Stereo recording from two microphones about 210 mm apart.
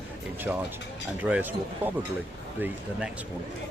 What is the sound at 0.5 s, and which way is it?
Speech, 5° right (ahead or behind).